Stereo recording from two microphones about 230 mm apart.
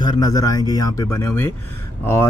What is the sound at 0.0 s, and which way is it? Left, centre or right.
Speech, centre.